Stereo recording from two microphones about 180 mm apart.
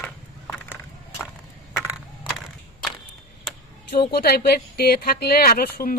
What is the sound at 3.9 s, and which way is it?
Speech, 60° left (ahead or behind).